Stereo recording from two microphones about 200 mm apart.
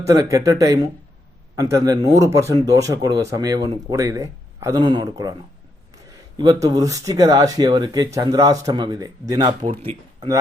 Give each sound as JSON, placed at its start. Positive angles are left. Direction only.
{"t": 0.0, "sound": "speech", "side_deg": -15}
{"t": 6.3, "sound": "speech", "side_deg": -20}